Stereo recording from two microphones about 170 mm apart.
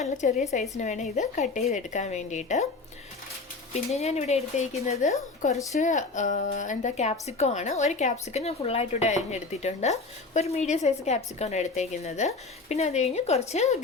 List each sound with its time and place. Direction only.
0.0 s a woman's voice: 45° left (ahead or behind)
3.7 s speech: 40° left (ahead or behind)